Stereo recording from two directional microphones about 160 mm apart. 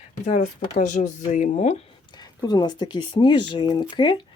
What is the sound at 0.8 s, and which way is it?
Speech, 50° left (ahead or behind).